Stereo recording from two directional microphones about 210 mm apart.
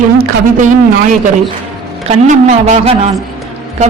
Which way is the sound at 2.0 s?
35° right (ahead or behind).